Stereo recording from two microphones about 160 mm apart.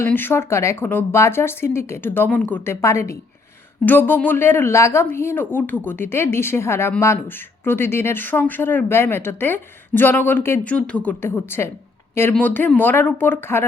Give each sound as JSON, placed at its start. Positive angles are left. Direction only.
{"t": 0.0, "sound": "speech", "side_deg": 15}